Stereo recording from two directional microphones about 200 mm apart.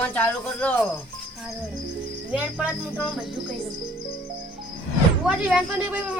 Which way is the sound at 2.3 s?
5° right (ahead or behind).